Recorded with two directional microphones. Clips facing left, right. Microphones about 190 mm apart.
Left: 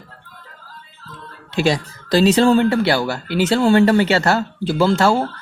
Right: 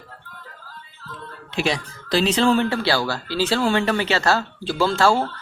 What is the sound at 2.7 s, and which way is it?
Speech, 20° left (ahead or behind).